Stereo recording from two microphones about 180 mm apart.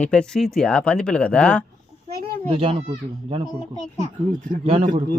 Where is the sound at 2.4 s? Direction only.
30° right (ahead or behind).